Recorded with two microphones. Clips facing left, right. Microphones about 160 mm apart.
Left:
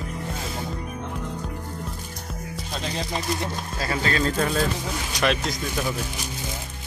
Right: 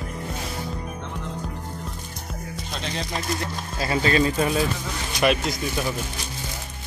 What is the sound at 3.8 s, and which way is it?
Speech, 15° right (ahead or behind).